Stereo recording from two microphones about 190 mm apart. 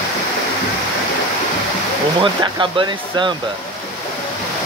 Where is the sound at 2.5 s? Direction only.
25° right (ahead or behind).